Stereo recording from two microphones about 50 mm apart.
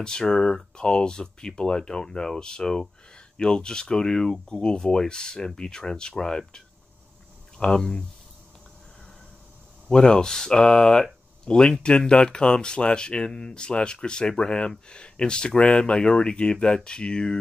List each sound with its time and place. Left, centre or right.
0.0 s speech: centre
9.8 s speech: centre